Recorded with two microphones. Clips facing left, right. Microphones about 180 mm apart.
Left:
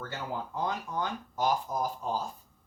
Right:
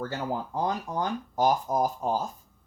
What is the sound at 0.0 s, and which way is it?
Speech, 35° right (ahead or behind).